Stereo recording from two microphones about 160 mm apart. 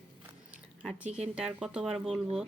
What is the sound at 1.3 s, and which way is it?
Speech, 5° right (ahead or behind).